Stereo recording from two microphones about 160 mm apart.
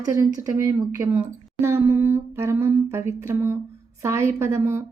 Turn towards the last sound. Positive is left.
turn(degrees=-15)  # may be behind; listen again after turning